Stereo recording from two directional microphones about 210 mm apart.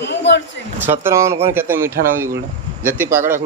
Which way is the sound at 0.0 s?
55° left (ahead or behind).